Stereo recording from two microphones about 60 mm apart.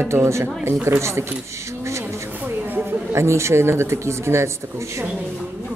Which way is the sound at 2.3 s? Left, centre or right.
Right.